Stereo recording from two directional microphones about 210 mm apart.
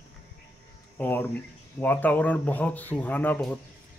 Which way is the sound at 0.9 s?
10° left (ahead or behind).